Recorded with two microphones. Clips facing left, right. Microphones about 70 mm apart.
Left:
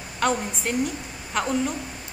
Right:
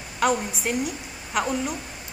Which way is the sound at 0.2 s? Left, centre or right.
Centre.